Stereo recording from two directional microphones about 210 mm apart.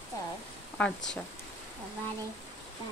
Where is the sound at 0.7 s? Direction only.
5° left (ahead or behind).